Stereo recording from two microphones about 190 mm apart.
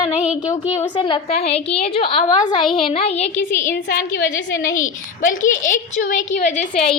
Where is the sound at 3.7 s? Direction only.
55° left (ahead or behind).